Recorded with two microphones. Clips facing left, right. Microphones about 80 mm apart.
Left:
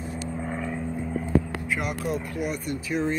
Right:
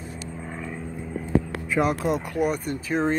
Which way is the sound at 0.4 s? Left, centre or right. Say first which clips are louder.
Left 4 dB; centre.